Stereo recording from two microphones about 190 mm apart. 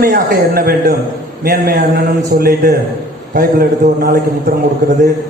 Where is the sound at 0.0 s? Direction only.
55° right (ahead or behind).